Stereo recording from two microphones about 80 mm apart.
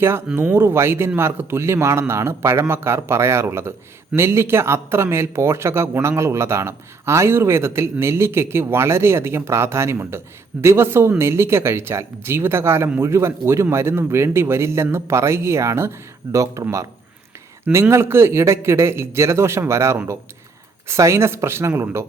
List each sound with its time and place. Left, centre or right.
0.5 s a man's voice: right
17.7 s a man's voice: right